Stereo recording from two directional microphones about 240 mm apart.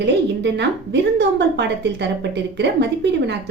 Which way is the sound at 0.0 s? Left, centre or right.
Right.